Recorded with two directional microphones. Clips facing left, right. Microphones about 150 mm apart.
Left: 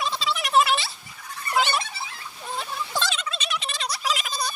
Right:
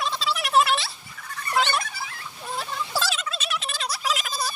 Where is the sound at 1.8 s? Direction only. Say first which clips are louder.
Even; 25° left (ahead or behind).